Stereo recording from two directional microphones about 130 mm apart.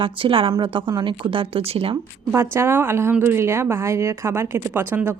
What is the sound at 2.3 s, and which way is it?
A woman's voice, 20° right (ahead or behind).